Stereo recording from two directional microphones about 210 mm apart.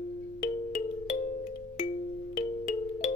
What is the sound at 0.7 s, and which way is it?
Music, 35° left (ahead or behind).